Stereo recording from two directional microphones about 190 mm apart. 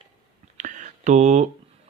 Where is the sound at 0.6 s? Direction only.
40° right (ahead or behind).